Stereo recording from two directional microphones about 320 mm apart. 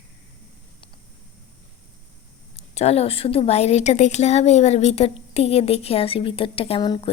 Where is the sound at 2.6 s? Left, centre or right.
Centre.